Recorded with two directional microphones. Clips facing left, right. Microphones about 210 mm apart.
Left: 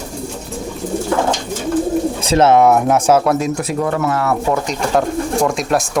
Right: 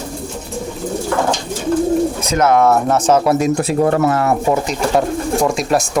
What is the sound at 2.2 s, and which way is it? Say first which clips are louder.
Speech: left 5 dB; 30° left (ahead or behind).